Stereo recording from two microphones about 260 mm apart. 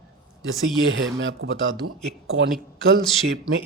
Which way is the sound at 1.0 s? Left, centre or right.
Right.